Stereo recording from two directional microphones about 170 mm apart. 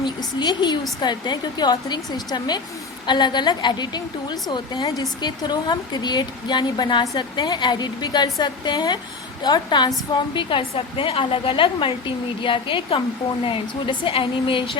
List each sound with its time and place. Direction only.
0.0 s a woman's voice: 25° left (ahead or behind)